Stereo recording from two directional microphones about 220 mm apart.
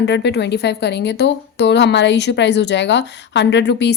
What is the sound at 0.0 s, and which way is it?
Speech, 50° left (ahead or behind).